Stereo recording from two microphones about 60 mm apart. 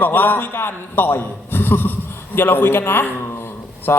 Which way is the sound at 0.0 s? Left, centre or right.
Left.